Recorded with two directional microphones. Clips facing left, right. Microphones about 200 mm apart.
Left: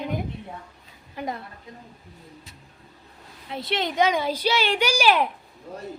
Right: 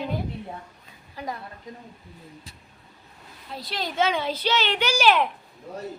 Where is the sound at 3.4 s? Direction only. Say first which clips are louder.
Left 5 dB; 25° left (ahead or behind).